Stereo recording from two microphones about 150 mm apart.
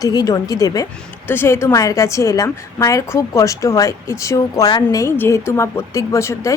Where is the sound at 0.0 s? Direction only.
25° left (ahead or behind).